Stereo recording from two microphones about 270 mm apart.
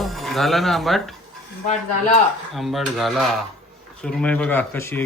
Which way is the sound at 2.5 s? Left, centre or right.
Centre.